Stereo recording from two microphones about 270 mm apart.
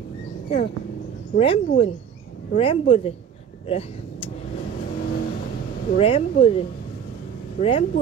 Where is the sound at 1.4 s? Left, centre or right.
Centre.